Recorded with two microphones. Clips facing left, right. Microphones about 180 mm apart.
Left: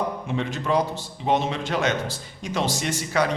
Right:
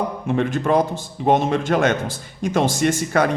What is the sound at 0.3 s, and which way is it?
A man's voice, 50° right (ahead or behind).